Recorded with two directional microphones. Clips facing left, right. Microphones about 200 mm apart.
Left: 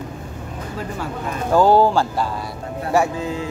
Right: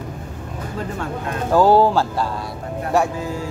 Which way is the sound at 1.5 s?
Centre (ahead or behind).